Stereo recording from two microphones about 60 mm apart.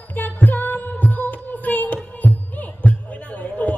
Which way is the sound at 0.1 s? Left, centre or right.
Left.